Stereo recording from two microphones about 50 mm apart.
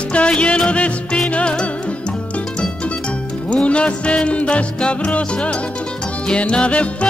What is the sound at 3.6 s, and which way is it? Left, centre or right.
Music, left.